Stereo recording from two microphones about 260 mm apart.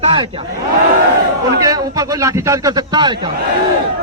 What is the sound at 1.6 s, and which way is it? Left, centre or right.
A man's voice, centre.